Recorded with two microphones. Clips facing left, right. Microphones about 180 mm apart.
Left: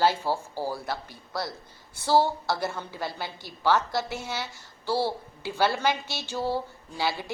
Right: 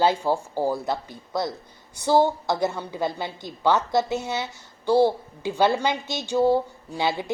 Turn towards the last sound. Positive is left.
turn(degrees=-20)  # may be behind; listen again after turning